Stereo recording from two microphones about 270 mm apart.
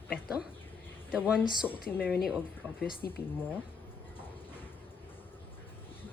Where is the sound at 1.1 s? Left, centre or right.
Centre.